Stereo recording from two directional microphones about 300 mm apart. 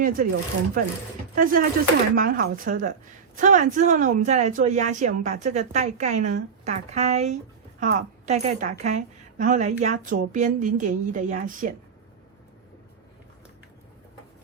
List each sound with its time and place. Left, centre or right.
0.0 s speech: right